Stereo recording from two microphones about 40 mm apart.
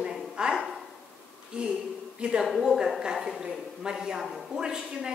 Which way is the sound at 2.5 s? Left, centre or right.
Centre.